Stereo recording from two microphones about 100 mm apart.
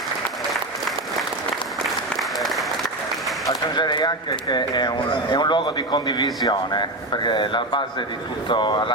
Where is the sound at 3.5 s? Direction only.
45° left (ahead or behind).